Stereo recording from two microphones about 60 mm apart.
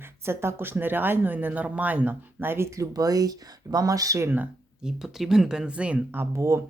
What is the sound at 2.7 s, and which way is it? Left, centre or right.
Speech, right.